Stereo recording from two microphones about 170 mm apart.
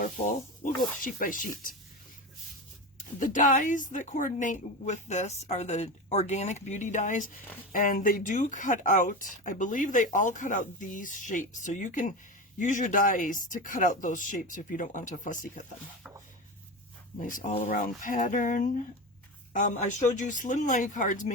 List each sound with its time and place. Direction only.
0.0 s speech: 50° left (ahead or behind)
3.2 s speech: 50° left (ahead or behind)
17.2 s speech: 50° left (ahead or behind)